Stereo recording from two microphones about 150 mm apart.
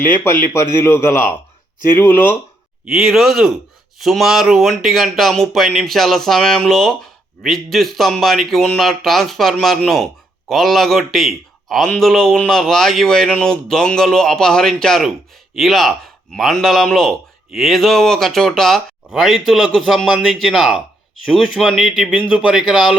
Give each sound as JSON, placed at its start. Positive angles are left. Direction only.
{"t": 0.5, "sound": "speech", "side_deg": 20}
{"t": 2.8, "sound": "speech", "side_deg": -5}